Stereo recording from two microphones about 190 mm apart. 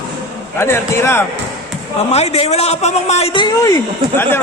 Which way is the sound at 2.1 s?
35° left (ahead or behind).